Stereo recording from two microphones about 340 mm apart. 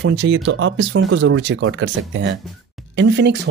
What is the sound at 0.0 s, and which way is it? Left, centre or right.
Speech, right.